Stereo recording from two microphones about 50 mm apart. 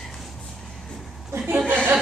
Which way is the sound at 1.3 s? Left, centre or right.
Right.